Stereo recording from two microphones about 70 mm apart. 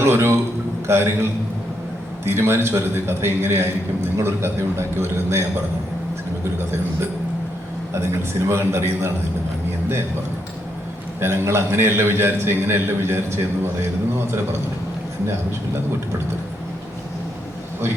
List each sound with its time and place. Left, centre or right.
0.0 s a man's voice: right
7.9 s a man's voice: right
11.2 s a man's voice: right